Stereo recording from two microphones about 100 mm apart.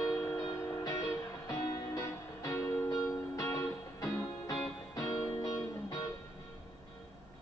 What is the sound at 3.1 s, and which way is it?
Music, 35° left (ahead or behind).